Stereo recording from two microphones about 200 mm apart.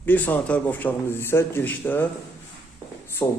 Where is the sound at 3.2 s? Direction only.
10° left (ahead or behind).